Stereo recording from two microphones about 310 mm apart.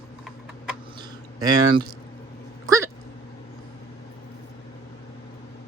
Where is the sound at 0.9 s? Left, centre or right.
Centre.